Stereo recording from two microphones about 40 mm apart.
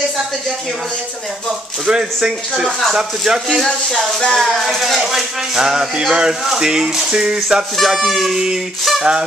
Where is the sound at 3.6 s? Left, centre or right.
Left.